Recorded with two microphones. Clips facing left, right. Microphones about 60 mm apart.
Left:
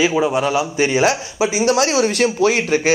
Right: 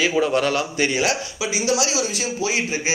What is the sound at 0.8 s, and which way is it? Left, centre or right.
Speech, left.